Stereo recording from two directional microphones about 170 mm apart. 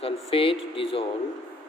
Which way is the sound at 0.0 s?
35° left (ahead or behind).